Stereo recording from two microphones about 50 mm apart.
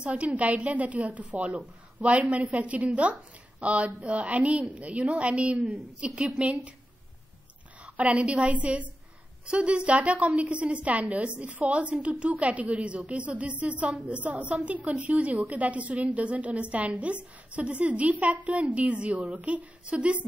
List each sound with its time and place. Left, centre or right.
0.0 s a woman's voice: right
7.8 s a woman's voice: right